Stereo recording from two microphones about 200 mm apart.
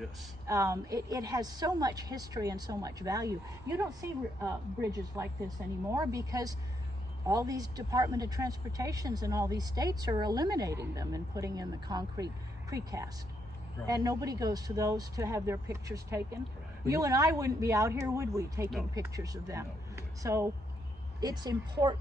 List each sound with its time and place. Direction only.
0.5 s a woman's voice: 15° right (ahead or behind)